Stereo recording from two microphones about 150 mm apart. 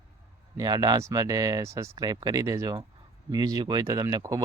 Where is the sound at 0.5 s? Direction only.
25° right (ahead or behind).